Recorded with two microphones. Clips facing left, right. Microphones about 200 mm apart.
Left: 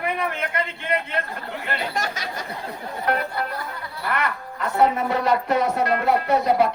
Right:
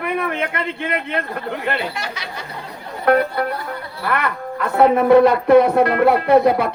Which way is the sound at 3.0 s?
60° right (ahead or behind).